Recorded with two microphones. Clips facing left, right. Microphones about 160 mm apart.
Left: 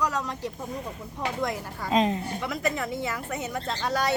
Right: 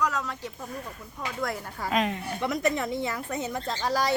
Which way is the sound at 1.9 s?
25° left (ahead or behind).